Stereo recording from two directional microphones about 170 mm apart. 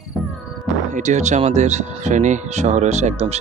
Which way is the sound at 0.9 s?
45° right (ahead or behind).